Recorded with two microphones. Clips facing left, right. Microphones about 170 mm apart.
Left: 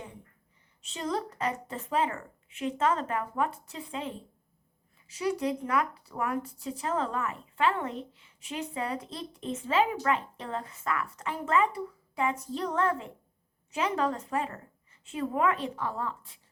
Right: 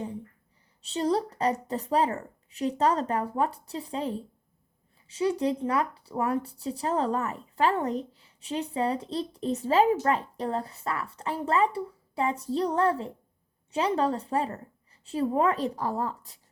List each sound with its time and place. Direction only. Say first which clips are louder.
0.8 s speech: right 6 dB; 35° right (ahead or behind)